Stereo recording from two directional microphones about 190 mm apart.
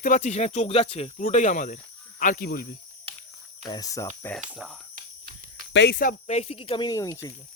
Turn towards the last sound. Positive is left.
turn(degrees=15)  # may be behind; listen again after turning